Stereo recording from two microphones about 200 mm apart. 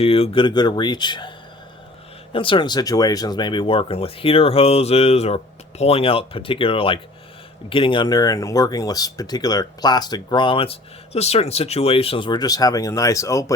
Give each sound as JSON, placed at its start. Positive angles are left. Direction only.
{"t": 0.0, "sound": "speech", "side_deg": 30}
{"t": 2.3, "sound": "speech", "side_deg": 25}